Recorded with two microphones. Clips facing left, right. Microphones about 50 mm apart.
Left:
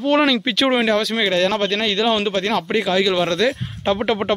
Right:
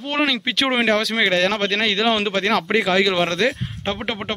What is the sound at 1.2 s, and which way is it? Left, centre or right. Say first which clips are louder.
Speech: even; right.